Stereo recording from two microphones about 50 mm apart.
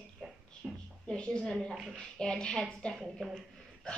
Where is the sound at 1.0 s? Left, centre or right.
Centre.